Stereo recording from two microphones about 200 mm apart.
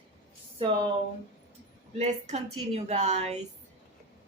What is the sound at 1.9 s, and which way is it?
A woman's voice, 35° right (ahead or behind).